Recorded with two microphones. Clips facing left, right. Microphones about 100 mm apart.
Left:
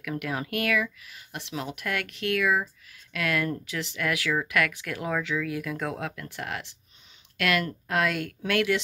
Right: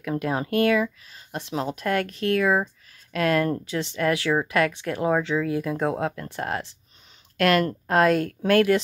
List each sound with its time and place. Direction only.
0.0 s speech: 30° right (ahead or behind)